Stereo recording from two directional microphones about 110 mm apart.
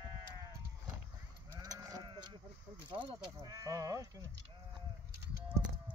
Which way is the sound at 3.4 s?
30° right (ahead or behind).